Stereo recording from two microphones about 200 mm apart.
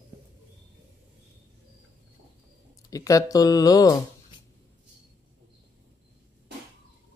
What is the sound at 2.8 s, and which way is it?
Speech, 15° left (ahead or behind).